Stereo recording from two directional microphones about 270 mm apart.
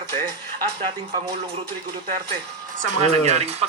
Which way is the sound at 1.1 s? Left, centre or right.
Centre.